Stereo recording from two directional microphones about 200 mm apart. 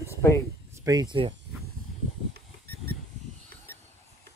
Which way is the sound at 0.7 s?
15° right (ahead or behind).